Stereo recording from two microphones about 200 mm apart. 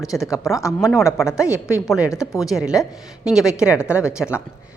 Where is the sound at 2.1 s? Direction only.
15° left (ahead or behind).